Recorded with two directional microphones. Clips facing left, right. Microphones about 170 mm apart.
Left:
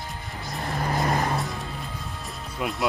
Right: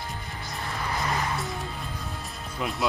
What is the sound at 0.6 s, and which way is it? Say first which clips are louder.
Vehicle: left 5 dB; 40° left (ahead or behind).